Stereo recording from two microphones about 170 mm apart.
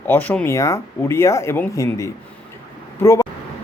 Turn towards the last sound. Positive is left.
turn(degrees=15)  # may be behind; listen again after turning